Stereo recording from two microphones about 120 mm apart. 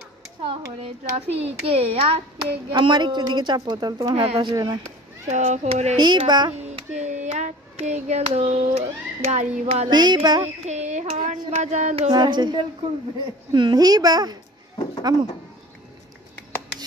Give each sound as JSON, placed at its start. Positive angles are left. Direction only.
{"t": 0.8, "sound": "a child's voice", "side_deg": -55}
{"t": 2.7, "sound": "a woman's voice", "side_deg": -40}
{"t": 4.1, "sound": "speech", "side_deg": -50}
{"t": 5.3, "sound": "child singing", "side_deg": -80}
{"t": 5.9, "sound": "a woman's voice", "side_deg": -40}
{"t": 6.6, "sound": "hands", "side_deg": -70}
{"t": 9.8, "sound": "a woman's voice", "side_deg": -35}
{"t": 10.7, "sound": "child singing", "side_deg": -70}
{"t": 12.1, "sound": "a woman's voice", "side_deg": -40}
{"t": 16.3, "sound": "finger snapping", "side_deg": 15}